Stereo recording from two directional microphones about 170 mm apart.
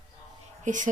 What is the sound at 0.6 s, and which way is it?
Speech, 50° right (ahead or behind).